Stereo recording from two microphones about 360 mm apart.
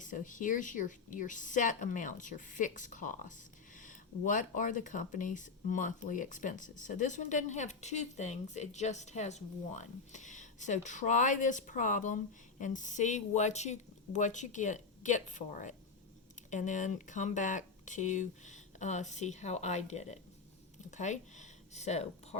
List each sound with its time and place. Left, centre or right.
0.0 s speech: left